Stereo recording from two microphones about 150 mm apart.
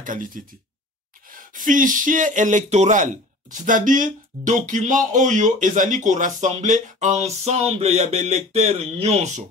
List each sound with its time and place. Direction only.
0.0 s speech: 65° right (ahead or behind); by 9.4 s 45° right (ahead or behind)